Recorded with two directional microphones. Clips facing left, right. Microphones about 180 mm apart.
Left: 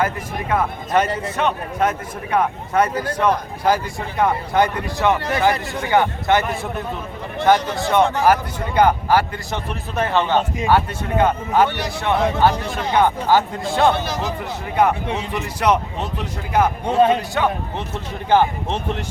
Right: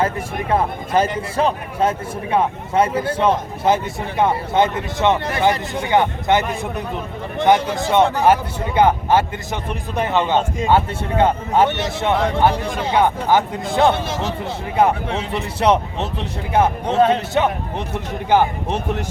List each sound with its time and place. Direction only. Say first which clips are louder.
1.4 s a man's voice: right 2 dB; 30° right (ahead or behind); by 19.0 s 10° right (ahead or behind)